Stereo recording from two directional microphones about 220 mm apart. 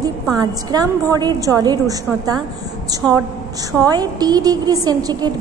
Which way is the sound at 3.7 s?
15° right (ahead or behind).